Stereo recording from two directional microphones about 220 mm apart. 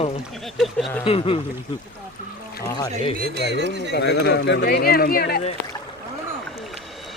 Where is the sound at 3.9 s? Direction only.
50° left (ahead or behind).